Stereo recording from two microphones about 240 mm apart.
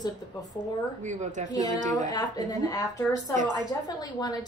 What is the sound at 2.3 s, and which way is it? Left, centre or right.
A woman's voice, centre.